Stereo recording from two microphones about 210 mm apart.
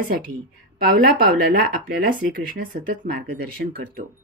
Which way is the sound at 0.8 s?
40° right (ahead or behind).